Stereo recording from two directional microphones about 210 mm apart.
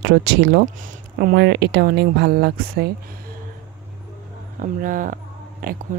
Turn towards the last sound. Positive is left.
turn(degrees=-45)  # may be behind; listen again after turning